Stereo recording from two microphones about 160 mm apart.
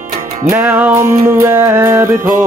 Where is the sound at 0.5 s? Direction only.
10° right (ahead or behind).